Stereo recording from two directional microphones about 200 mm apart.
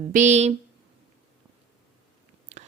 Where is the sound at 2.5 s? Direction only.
35° right (ahead or behind).